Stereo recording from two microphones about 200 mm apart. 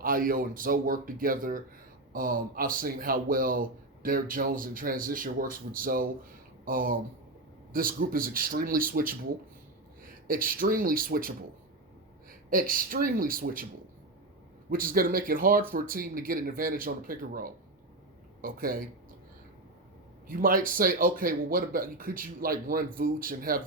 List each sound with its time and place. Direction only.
0.0 s a man's voice: 45° right (ahead or behind)
10.2 s a man's voice: 45° right (ahead or behind)
12.5 s a man's voice: 45° right (ahead or behind)
14.7 s a man's voice: 45° right (ahead or behind)
20.2 s a man's voice: 45° right (ahead or behind)